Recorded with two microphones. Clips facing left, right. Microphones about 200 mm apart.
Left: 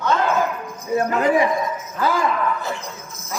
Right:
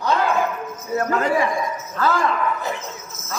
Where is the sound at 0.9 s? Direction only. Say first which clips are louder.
Left 2 dB; 15° left (ahead or behind).